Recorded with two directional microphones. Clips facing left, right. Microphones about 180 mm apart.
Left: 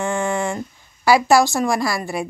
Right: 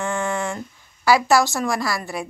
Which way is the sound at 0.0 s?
15° left (ahead or behind).